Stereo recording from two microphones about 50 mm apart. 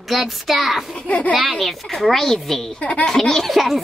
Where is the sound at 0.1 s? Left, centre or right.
Centre.